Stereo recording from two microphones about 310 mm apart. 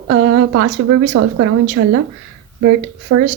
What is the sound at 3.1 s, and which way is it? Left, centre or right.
Speech, right.